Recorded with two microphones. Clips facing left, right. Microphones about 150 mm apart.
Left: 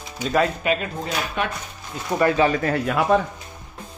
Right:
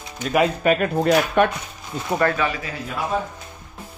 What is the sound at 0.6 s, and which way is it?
Speech, 55° right (ahead or behind).